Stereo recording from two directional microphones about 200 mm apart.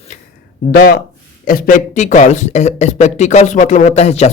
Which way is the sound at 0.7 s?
50° left (ahead or behind).